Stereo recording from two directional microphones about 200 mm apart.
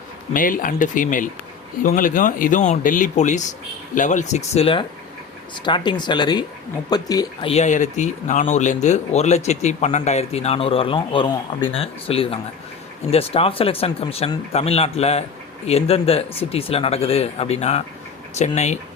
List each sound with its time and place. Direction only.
0.3 s speech: 45° left (ahead or behind); by 7.5 s 20° left (ahead or behind)
7.5 s speech: 35° left (ahead or behind)